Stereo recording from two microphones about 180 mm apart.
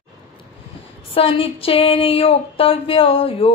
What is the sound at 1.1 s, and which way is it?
Speech, 30° left (ahead or behind).